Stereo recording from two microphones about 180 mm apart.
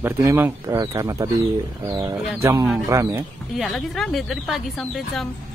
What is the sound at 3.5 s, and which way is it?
A woman's voice, centre (ahead or behind).